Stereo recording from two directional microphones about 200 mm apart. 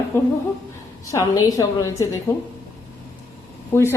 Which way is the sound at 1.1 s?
15° left (ahead or behind).